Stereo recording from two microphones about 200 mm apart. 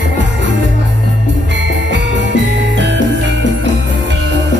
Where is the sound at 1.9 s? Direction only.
65° right (ahead or behind).